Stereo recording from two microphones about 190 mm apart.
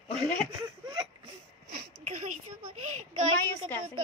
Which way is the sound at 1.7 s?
40° right (ahead or behind).